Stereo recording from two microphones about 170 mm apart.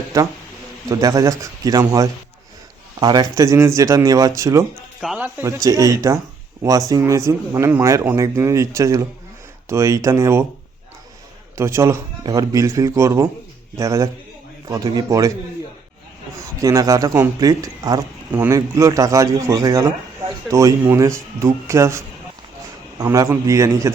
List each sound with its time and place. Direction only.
0.9 s speech: 20° right (ahead or behind)
4.9 s speech: 5° right (ahead or behind)
11.5 s speech: 15° right (ahead or behind)
16.6 s speech: 20° right (ahead or behind)